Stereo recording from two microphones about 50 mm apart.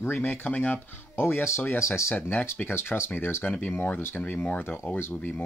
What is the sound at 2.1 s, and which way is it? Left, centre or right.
Speech, left.